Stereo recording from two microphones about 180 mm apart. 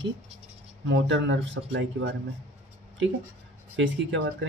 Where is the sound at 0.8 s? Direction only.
75° right (ahead or behind).